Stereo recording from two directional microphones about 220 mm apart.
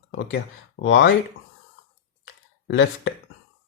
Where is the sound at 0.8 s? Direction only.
50° left (ahead or behind).